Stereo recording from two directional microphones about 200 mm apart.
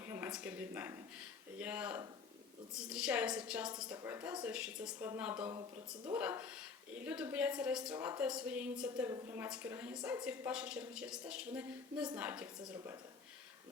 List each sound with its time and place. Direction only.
0.0 s a woman's voice: 10° right (ahead or behind)
12.5 s speech: 20° right (ahead or behind)